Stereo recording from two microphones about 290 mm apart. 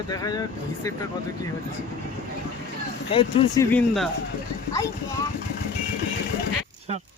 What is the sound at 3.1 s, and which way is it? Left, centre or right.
Speech, centre.